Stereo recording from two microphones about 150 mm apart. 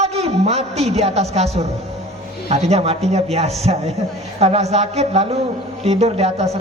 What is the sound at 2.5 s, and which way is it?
A man's voice, 45° right (ahead or behind).